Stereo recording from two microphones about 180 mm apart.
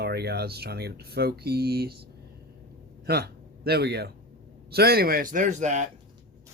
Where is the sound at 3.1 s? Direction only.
60° right (ahead or behind); by 5.8 s 40° right (ahead or behind).